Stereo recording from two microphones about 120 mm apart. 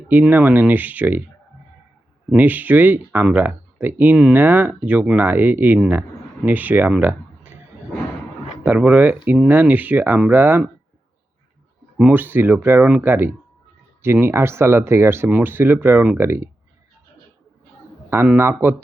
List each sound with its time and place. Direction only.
0.1 s speech: 15° right (ahead or behind)
2.3 s speech: 15° right (ahead or behind)
8.6 s speech: 15° right (ahead or behind)
11.9 s speech: 15° right (ahead or behind)
18.1 s speech: 20° right (ahead or behind)